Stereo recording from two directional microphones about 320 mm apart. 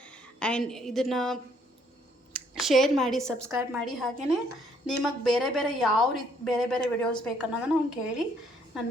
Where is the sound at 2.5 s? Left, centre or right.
Centre.